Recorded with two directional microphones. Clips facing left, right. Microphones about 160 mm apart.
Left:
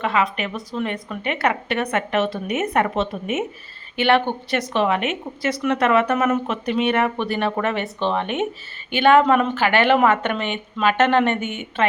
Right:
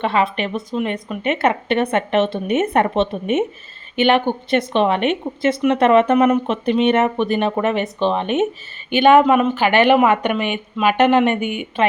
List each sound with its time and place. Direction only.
0.0 s a woman's voice: 30° right (ahead or behind)
3.9 s a woman's voice: 15° right (ahead or behind)